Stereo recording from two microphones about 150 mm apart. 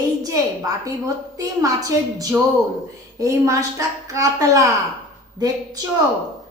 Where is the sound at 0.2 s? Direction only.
25° right (ahead or behind).